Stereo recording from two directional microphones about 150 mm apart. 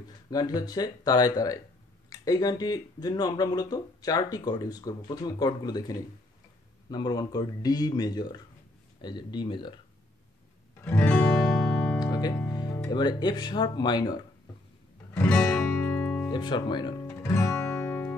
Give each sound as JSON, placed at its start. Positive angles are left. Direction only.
{"t": 0.3, "sound": "speech", "side_deg": 25}
{"t": 10.8, "sound": "guitar", "side_deg": 10}
{"t": 12.0, "sound": "music", "side_deg": 25}
{"t": 12.9, "sound": "speech", "side_deg": 30}
{"t": 15.1, "sound": "music", "side_deg": 10}
{"t": 16.3, "sound": "speech", "side_deg": 30}
{"t": 17.1, "sound": "music", "side_deg": 20}